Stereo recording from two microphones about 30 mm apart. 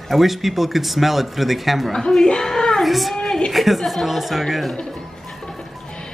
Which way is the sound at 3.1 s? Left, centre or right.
Centre.